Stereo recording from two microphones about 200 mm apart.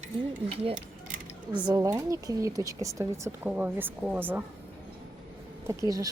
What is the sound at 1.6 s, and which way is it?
Speech, 15° right (ahead or behind).